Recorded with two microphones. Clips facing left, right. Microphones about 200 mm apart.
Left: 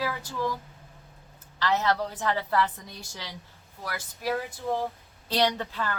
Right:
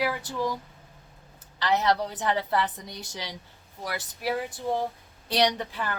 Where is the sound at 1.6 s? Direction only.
15° right (ahead or behind).